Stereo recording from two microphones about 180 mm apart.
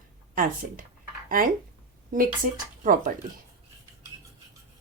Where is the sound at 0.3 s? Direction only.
50° right (ahead or behind).